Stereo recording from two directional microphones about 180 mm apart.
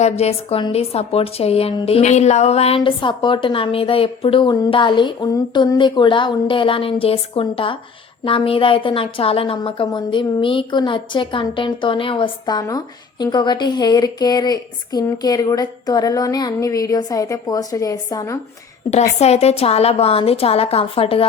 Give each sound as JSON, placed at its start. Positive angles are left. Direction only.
{"t": 0.0, "sound": "a woman's voice", "side_deg": 35}
{"t": 19.2, "sound": "a woman's voice", "side_deg": 35}